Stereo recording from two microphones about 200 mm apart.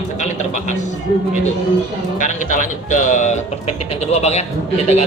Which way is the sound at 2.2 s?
40° left (ahead or behind).